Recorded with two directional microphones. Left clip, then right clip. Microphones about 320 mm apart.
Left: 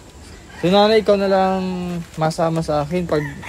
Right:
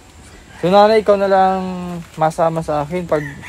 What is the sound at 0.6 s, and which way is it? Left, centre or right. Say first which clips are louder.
Speech: right 3 dB; centre.